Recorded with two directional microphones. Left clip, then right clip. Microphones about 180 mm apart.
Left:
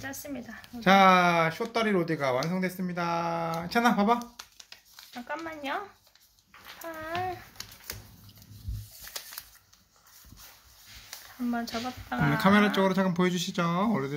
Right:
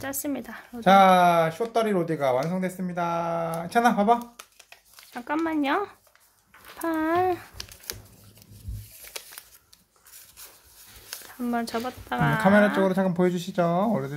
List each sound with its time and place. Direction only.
0.0 s speech: 65° right (ahead or behind)
0.8 s speech: 10° right (ahead or behind)
5.1 s speech: 55° right (ahead or behind)
6.8 s speech: 70° right (ahead or behind)
11.5 s speech: 60° right (ahead or behind)
12.7 s speech: 15° right (ahead or behind)